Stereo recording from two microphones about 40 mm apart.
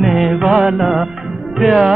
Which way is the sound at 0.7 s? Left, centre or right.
Centre.